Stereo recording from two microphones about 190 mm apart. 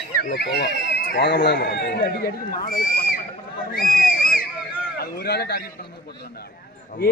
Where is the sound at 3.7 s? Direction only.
50° left (ahead or behind).